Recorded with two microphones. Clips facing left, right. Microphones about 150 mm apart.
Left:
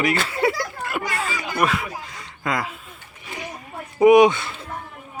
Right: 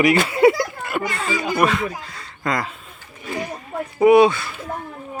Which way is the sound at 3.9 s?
15° left (ahead or behind).